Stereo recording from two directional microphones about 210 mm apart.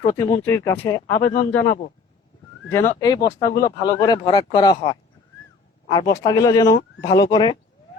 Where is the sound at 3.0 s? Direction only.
20° left (ahead or behind).